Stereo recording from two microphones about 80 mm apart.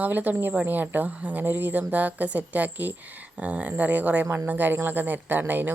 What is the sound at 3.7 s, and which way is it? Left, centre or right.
Speech, right.